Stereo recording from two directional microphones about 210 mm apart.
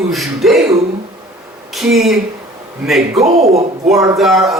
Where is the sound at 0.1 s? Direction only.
Centre (ahead or behind).